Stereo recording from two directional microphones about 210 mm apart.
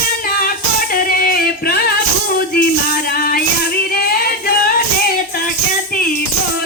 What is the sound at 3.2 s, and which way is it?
Music, 45° left (ahead or behind).